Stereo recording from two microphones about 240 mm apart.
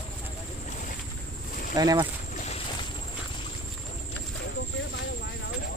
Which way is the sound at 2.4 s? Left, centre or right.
Left.